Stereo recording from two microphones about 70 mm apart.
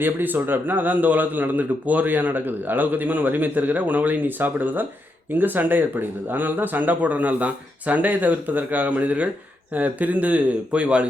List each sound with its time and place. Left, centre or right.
0.0 s a man's voice: right